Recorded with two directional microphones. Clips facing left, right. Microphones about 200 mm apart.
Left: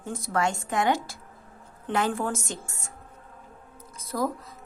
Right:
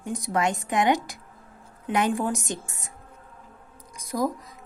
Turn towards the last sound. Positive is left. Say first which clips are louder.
# right 2 dB
turn(degrees=-15)  # may be behind; listen again after turning